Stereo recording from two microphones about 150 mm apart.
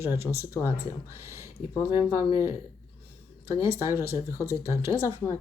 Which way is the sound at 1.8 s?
35° left (ahead or behind).